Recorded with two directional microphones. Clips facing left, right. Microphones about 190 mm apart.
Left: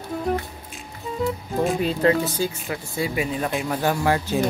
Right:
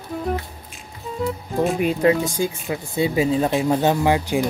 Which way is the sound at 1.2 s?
Centre (ahead or behind).